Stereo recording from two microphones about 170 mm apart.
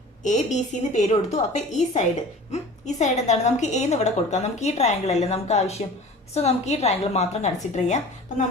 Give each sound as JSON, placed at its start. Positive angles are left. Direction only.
{"t": 0.2, "sound": "a woman's voice", "side_deg": 45}